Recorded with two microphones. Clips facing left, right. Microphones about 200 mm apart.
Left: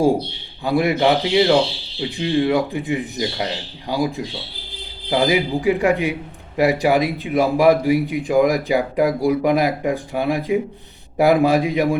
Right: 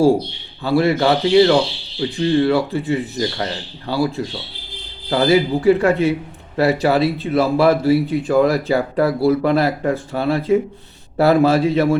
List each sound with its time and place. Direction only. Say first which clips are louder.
0.6 s speech: right 1 dB; 15° left (ahead or behind)